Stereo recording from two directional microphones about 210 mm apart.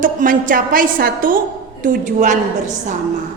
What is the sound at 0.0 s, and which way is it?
A woman's voice, 40° right (ahead or behind).